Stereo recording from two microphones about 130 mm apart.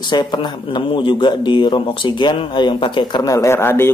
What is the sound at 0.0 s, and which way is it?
Speech, 35° left (ahead or behind).